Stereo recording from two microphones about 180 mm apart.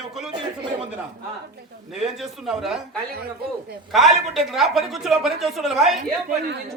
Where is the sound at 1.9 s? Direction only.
Centre (ahead or behind).